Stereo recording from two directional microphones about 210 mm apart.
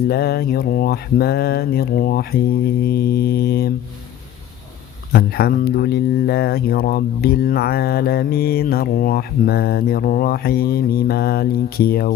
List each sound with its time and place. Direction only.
0.1 s speech: 50° left (ahead or behind)
5.1 s speech: 45° left (ahead or behind)